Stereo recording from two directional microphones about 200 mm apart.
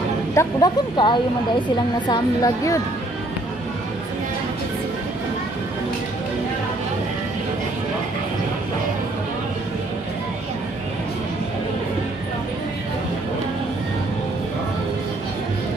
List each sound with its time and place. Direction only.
0.3 s a woman's voice: 15° left (ahead or behind)